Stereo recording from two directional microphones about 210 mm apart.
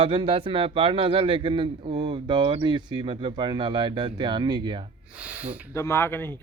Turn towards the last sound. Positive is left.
turn(degrees=10)  # may be behind; listen again after turning